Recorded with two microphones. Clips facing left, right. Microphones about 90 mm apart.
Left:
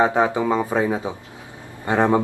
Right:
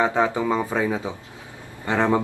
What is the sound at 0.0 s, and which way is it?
Speech, 20° left (ahead or behind).